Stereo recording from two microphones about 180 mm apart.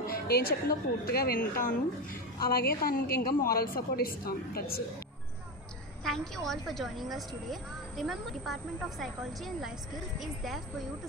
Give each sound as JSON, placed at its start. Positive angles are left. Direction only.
{"t": 0.0, "sound": "a woman's voice", "side_deg": 55}
{"t": 6.0, "sound": "speech", "side_deg": 0}